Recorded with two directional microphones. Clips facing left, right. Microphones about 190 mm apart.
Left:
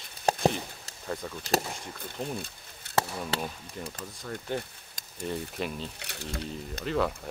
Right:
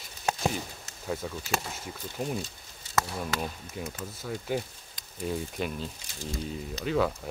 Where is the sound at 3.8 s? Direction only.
5° right (ahead or behind).